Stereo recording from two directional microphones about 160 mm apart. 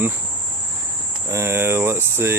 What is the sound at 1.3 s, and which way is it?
Speech, 15° right (ahead or behind).